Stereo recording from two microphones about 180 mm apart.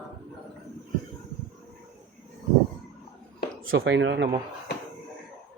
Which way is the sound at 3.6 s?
90° right.